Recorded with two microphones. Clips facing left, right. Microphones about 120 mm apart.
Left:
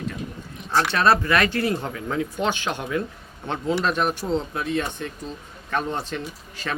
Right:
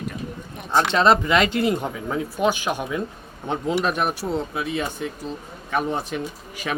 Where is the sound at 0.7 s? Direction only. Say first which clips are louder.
Right 2 dB; 20° right (ahead or behind).